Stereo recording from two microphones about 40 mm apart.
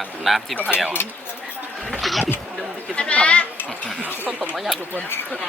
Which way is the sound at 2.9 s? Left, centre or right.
Left.